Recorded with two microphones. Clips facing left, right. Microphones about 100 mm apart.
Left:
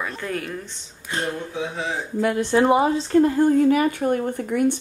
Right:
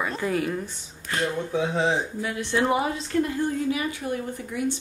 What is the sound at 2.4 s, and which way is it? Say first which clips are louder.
A woman's voice: left 5 dB; 30° left (ahead or behind).